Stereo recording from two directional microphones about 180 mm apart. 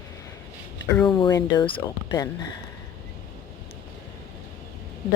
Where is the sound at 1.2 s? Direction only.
20° left (ahead or behind).